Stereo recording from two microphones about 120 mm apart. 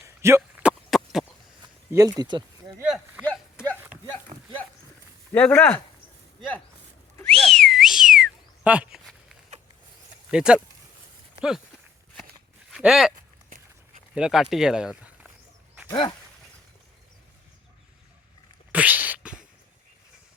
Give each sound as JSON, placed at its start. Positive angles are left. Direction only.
{"t": 0.2, "sound": "speech", "side_deg": -20}
{"t": 0.6, "sound": "a sound", "side_deg": -5}
{"t": 1.9, "sound": "speech", "side_deg": -30}
{"t": 5.3, "sound": "speech", "side_deg": 15}
{"t": 7.3, "sound": "whistling", "side_deg": 5}
{"t": 10.3, "sound": "speech", "side_deg": -5}
{"t": 12.7, "sound": "speech", "side_deg": -5}
{"t": 14.2, "sound": "speech", "side_deg": -5}
{"t": 15.9, "sound": "speech", "side_deg": 35}
{"t": 18.7, "sound": "a sound", "side_deg": -15}